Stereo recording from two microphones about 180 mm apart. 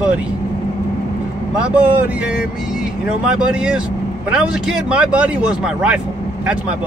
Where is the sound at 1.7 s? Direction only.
5° right (ahead or behind).